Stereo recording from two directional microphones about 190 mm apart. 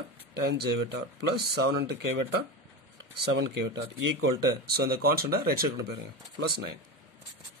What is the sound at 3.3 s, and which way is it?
Speech, 65° right (ahead or behind).